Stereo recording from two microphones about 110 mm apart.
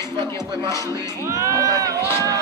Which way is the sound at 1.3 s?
30° right (ahead or behind).